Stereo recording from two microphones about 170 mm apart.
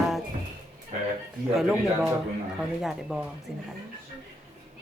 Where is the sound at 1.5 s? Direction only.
5° right (ahead or behind).